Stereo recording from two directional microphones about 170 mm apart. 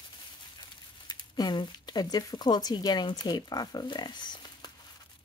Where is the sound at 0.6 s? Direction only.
25° left (ahead or behind).